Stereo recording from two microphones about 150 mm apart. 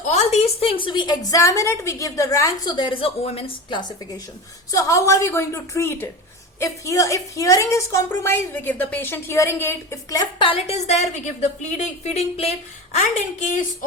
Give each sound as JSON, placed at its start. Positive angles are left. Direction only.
{"t": 0.1, "sound": "a woman's voice", "side_deg": 40}
{"t": 10.3, "sound": "a woman's voice", "side_deg": 35}
{"t": 13.0, "sound": "a woman's voice", "side_deg": 60}